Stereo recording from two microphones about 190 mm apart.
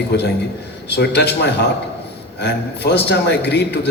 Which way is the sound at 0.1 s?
65° left (ahead or behind).